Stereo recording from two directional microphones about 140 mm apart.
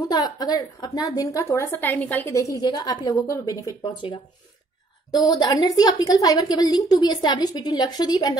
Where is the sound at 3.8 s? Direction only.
35° left (ahead or behind).